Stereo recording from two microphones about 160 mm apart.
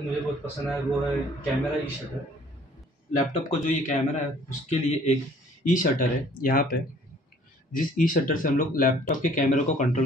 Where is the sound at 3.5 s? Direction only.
45° left (ahead or behind).